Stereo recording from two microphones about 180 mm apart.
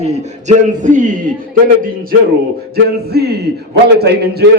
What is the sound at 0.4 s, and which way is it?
Speech, 45° right (ahead or behind).